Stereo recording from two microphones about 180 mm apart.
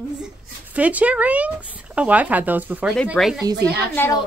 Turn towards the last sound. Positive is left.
turn(degrees=10)  # may be behind; listen again after turning